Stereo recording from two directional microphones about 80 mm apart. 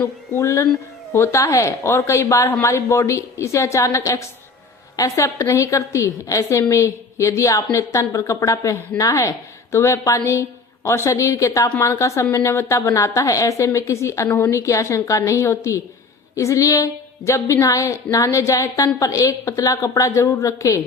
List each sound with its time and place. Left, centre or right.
0.0 s a woman's voice: left